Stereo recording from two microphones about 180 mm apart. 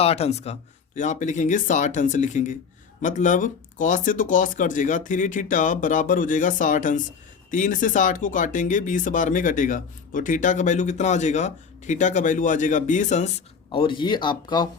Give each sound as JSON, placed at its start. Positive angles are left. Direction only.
{"t": 0.0, "sound": "speech", "side_deg": 35}
{"t": 13.7, "sound": "speech", "side_deg": 25}